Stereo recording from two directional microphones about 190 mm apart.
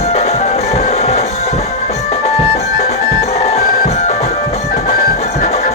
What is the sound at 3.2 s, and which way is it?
Music, 35° left (ahead or behind).